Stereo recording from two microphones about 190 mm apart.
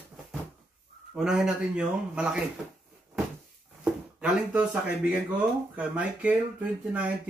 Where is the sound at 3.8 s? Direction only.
5° right (ahead or behind).